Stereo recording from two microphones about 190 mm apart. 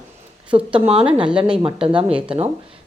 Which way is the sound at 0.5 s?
30° right (ahead or behind).